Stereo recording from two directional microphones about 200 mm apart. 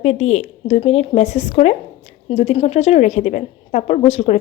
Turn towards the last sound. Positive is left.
turn(degrees=30)  # may be behind; listen again after turning